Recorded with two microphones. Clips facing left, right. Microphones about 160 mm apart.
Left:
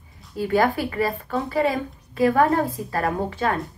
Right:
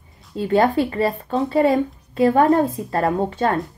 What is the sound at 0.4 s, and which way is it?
A woman's voice, 25° right (ahead or behind).